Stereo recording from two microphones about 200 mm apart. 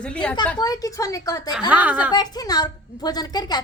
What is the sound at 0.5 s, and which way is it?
Speech, 20° left (ahead or behind).